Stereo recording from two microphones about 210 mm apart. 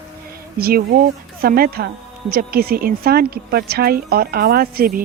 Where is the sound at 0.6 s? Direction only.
45° right (ahead or behind).